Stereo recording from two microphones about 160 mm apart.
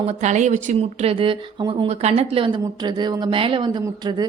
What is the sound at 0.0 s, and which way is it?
A woman's voice, 45° right (ahead or behind).